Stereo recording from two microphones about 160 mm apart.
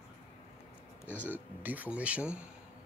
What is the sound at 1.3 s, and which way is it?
Speech, 10° right (ahead or behind).